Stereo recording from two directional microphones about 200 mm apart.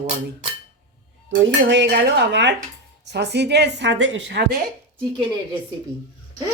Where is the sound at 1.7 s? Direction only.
60° right (ahead or behind).